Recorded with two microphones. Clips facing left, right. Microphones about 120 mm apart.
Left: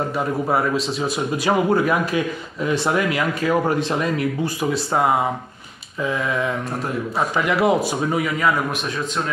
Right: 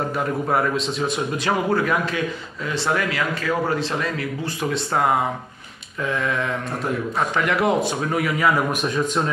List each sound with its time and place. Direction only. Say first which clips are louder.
0.5 s a man's voice: even; 5° left (ahead or behind)
6.0 s a man's voice: left 1 dB; 5° left (ahead or behind)